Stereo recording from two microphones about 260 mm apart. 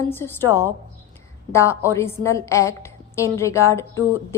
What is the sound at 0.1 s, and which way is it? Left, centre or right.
Speech, centre.